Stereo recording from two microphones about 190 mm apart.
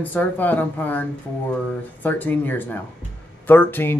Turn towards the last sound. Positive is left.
turn(degrees=10)  # may be behind; listen again after turning